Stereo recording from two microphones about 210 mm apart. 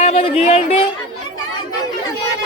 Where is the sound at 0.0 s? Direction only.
30° left (ahead or behind).